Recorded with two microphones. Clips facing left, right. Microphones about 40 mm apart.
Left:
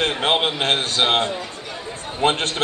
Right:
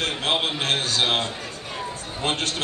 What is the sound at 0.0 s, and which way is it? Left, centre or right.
A man's voice, left.